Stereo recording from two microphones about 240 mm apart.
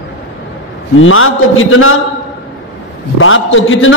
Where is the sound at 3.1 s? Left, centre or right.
Left.